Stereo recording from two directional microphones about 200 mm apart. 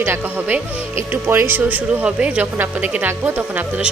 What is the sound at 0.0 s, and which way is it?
Speech, 10° right (ahead or behind).